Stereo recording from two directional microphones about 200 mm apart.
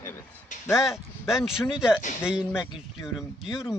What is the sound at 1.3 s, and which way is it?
Speech, centre (ahead or behind).